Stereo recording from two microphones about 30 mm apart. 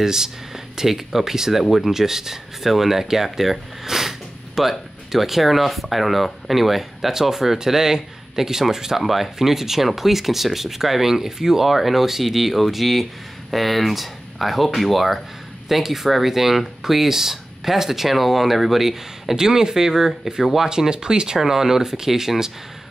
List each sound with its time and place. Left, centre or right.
0.0 s speech: centre
15.8 s speech: centre
19.3 s speech: centre
21.4 s speech: centre